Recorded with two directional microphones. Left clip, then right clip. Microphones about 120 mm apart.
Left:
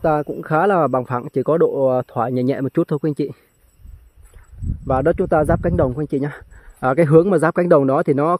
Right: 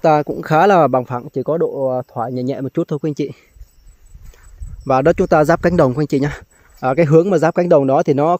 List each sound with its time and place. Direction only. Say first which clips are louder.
0.0 s speech: right 5 dB; 30° right (ahead or behind)
1.2 s speech: left 2 dB; 15° left (ahead or behind)
3.0 s speech: even; centre (ahead or behind)
4.8 s speech: right 4 dB; 20° right (ahead or behind)
6.8 s speech: right 1 dB; centre (ahead or behind)